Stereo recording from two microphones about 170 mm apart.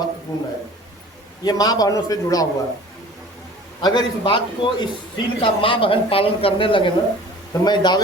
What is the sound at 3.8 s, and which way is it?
A man's voice, 25° left (ahead or behind).